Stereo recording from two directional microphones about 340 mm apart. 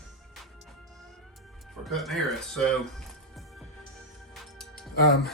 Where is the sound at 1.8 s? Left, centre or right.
Centre.